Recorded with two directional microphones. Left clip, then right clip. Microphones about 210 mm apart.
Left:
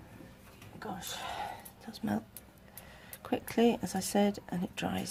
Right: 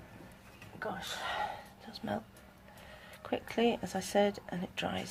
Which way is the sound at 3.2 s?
30° left (ahead or behind).